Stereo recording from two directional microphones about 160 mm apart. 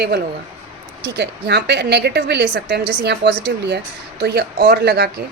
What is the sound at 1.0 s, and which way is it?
A woman's voice, 90° right.